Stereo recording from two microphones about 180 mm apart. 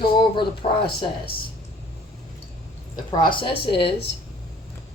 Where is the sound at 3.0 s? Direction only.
25° left (ahead or behind).